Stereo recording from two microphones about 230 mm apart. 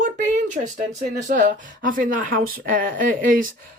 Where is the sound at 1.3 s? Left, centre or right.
Right.